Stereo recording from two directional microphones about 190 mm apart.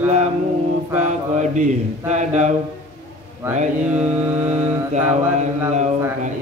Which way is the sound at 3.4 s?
10° right (ahead or behind).